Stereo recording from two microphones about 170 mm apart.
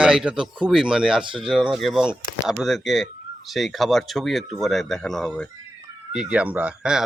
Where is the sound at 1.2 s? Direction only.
30° right (ahead or behind).